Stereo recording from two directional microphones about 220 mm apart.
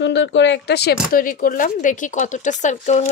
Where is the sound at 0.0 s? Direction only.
55° left (ahead or behind).